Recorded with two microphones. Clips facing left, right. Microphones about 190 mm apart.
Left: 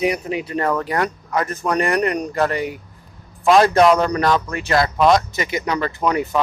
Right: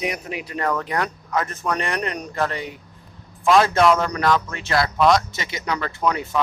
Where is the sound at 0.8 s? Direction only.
Centre (ahead or behind).